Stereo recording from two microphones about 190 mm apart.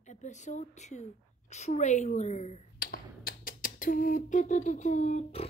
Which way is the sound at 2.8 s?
50° left (ahead or behind).